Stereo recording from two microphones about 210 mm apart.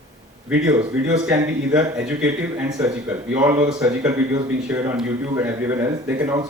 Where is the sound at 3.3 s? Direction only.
5° right (ahead or behind).